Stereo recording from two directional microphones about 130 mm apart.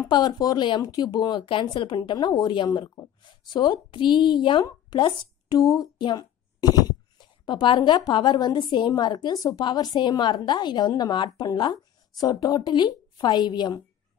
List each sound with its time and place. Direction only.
0.1 s speech: 35° left (ahead or behind)